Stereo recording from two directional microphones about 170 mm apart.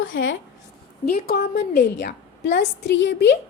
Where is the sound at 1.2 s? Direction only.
65° left (ahead or behind).